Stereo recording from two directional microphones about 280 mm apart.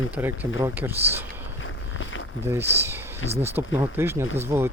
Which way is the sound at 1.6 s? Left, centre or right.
Left.